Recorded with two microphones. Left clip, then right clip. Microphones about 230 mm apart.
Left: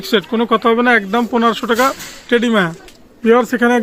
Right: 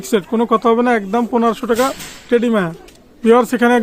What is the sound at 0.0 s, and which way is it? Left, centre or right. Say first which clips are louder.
Speech: left 1 dB; centre.